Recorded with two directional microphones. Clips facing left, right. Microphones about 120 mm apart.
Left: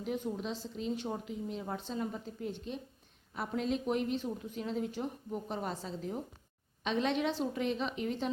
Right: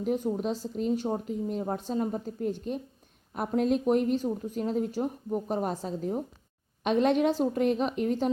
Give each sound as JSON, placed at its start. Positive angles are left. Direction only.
{"t": 0.0, "sound": "a woman's voice", "side_deg": -45}